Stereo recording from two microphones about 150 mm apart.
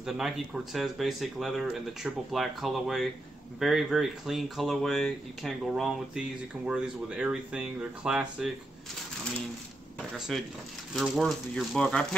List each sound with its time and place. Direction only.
0.7 s speech: centre (ahead or behind)
10.1 s speech: 5° right (ahead or behind)